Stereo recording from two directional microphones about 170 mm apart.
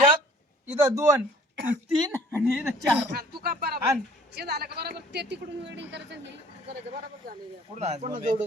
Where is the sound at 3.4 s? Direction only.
65° right (ahead or behind); by 6.2 s 90° right.